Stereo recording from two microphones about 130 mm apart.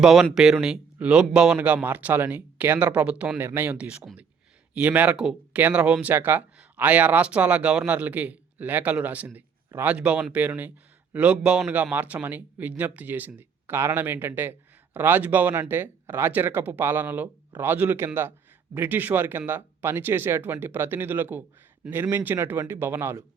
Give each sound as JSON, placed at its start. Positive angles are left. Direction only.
{"t": 0.0, "sound": "speech", "side_deg": -5}